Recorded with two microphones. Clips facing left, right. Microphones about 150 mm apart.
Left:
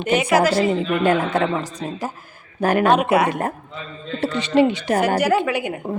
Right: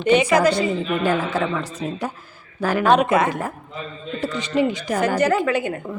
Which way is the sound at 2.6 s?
55° left (ahead or behind).